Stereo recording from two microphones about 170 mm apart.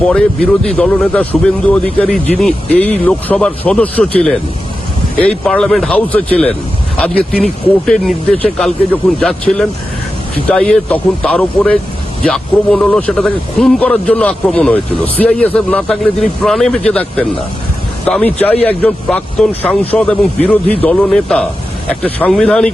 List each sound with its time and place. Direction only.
0.0 s speech: 5° left (ahead or behind)